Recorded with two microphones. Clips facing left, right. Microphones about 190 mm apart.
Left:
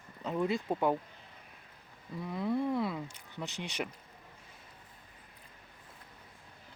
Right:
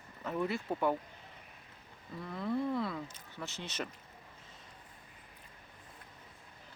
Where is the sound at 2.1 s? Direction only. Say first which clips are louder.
Left 3 dB; 15° left (ahead or behind).